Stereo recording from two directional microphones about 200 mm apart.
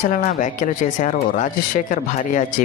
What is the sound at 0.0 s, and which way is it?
Speech, 40° left (ahead or behind).